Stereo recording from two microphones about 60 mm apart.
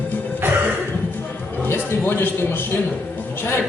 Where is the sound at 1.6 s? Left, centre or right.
Left.